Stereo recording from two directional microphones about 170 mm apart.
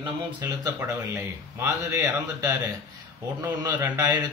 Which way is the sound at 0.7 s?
15° right (ahead or behind).